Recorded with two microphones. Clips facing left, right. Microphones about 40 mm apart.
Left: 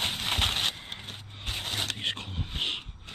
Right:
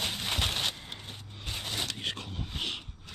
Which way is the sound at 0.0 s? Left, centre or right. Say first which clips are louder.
Left 3 dB; left.